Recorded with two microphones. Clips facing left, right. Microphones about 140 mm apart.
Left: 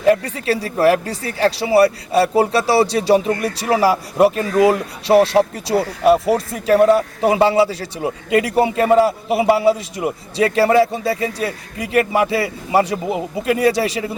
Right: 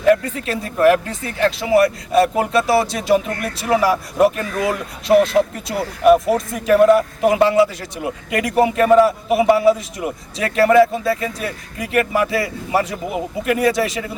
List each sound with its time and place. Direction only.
0.1 s a man's voice: 35° left (ahead or behind)